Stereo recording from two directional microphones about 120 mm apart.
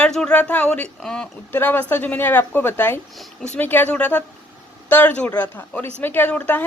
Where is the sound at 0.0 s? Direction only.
10° left (ahead or behind).